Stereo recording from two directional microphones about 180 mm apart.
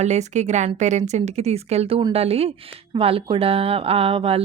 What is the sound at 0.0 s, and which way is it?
A woman's voice, 40° right (ahead or behind).